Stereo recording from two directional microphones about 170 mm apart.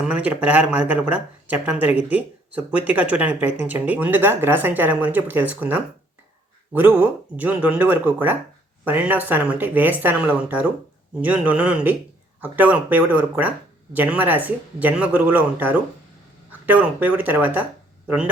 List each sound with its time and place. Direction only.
0.0 s speech: 10° right (ahead or behind)